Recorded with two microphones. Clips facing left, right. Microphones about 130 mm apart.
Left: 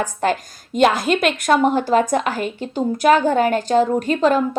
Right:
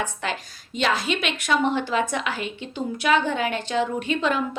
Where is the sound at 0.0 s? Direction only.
45° left (ahead or behind).